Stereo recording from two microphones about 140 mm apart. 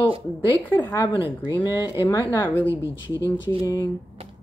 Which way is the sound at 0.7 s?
20° left (ahead or behind).